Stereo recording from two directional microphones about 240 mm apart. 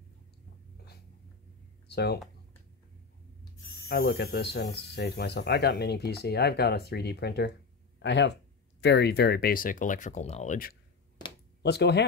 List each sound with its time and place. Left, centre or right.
1.9 s speech: left
3.9 s speech: left